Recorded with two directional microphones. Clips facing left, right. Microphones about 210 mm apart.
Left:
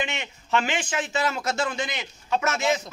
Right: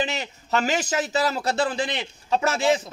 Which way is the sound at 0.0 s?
35° right (ahead or behind).